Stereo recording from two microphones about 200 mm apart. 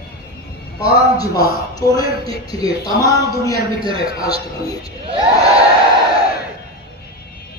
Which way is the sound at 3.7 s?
25° right (ahead or behind).